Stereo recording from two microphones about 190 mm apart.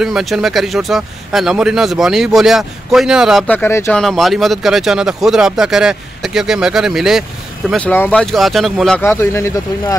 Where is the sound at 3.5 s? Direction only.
10° left (ahead or behind).